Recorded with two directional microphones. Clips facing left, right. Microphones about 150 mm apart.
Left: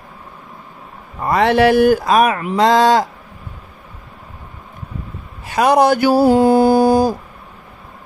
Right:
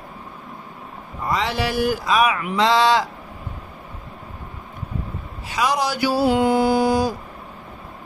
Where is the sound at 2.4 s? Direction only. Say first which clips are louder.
Left 5 dB; 40° left (ahead or behind).